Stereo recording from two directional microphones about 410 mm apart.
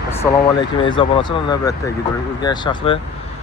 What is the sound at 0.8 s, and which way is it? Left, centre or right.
Speech, centre.